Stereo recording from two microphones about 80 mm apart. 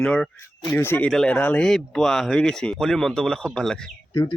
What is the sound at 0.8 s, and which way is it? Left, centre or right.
Speech, left.